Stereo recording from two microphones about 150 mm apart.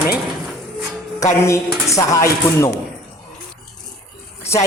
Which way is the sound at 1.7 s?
5° right (ahead or behind).